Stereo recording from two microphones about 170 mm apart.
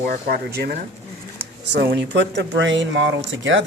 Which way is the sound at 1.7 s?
80° right.